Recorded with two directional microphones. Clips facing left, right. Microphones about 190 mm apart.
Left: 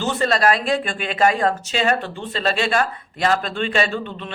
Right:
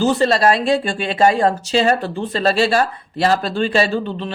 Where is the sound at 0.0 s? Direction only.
35° right (ahead or behind).